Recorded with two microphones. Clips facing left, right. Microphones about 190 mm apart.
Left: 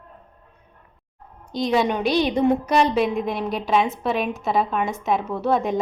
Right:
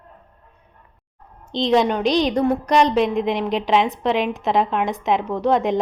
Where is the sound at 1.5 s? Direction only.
20° right (ahead or behind).